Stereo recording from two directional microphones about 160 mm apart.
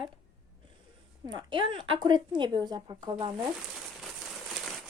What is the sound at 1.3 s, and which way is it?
Speech, 30° right (ahead or behind).